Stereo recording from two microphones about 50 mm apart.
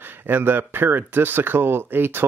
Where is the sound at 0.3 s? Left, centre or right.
Right.